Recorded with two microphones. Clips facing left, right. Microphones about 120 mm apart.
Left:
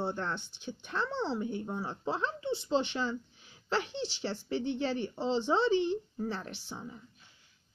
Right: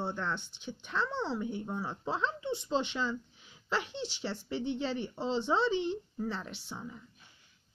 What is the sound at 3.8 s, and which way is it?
Speech, 20° right (ahead or behind).